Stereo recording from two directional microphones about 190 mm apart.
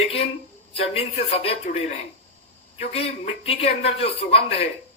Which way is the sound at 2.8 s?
30° left (ahead or behind).